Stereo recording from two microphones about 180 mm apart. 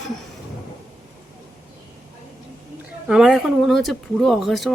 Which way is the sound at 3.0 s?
5° right (ahead or behind).